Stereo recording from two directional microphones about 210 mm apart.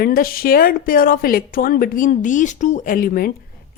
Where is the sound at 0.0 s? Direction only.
45° left (ahead or behind).